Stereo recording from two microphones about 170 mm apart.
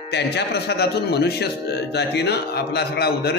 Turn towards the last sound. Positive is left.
turn(degrees=70)  # may be behind; listen again after turning